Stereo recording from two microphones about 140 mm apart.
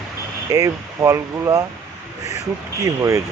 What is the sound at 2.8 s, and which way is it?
Speech, 25° right (ahead or behind).